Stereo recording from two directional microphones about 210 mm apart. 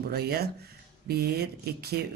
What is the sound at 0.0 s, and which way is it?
Speech, 50° right (ahead or behind).